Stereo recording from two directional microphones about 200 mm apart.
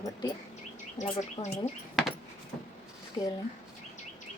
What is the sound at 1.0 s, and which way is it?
Speech, 35° left (ahead or behind).